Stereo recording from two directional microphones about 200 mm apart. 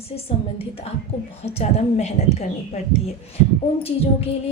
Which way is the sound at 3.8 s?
30° left (ahead or behind).